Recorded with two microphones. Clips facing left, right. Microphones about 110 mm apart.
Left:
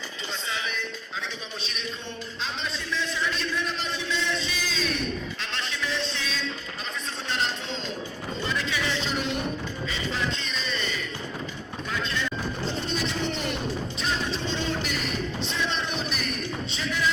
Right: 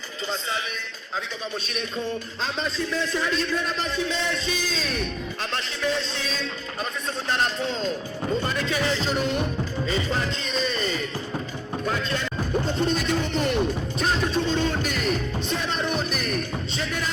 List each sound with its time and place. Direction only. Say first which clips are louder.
2.4 s a man's voice: right 5 dB; 40° right (ahead or behind)
5.8 s a man's voice: right 5 dB; 40° right (ahead or behind)
8.4 s music: right 4 dB; 45° right (ahead or behind)
12.6 s a man's voice: right 4 dB; 50° right (ahead or behind)
14.0 s music: right 7 dB; 50° right (ahead or behind)
15.4 s a man's voice: right 3 dB; 45° right (ahead or behind)